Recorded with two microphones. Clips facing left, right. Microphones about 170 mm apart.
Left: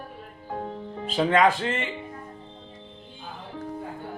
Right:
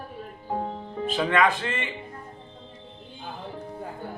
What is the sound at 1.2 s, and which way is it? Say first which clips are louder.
Speech: left 3 dB; 35° left (ahead or behind).